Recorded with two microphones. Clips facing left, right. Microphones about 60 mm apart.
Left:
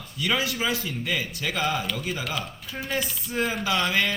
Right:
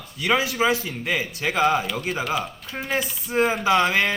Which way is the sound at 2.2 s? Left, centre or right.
Centre.